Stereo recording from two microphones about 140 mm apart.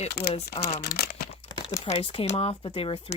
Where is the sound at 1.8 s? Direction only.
45° left (ahead or behind).